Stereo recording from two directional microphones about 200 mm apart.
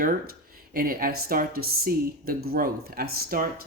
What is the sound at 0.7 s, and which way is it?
Speech, 45° right (ahead or behind).